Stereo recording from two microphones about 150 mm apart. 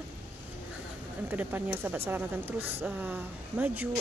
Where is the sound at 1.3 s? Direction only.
15° right (ahead or behind).